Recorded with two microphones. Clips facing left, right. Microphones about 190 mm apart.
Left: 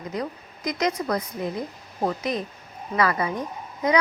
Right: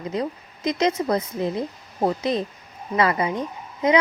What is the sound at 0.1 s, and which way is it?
A woman's voice, 25° right (ahead or behind).